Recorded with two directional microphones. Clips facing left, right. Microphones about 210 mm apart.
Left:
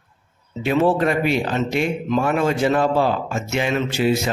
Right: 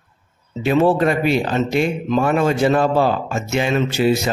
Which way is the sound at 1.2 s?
35° right (ahead or behind).